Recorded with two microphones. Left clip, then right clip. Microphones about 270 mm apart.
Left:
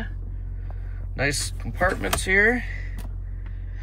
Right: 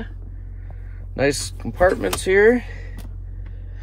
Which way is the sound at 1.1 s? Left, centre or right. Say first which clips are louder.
Right 5 dB; centre.